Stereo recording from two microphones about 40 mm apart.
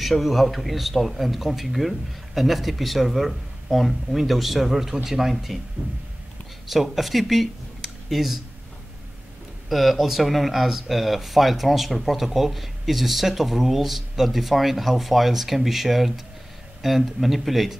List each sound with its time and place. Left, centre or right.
0.0 s speech: centre
5.8 s speech: right
6.7 s speech: centre
9.7 s speech: centre